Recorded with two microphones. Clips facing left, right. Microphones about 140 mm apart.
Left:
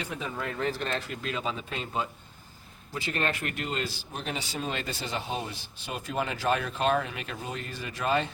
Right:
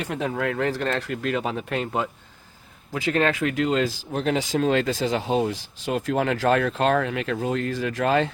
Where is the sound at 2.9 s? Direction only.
90° right.